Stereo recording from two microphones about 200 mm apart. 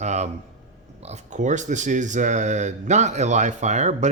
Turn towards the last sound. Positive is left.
turn(degrees=-35)  # may be behind; listen again after turning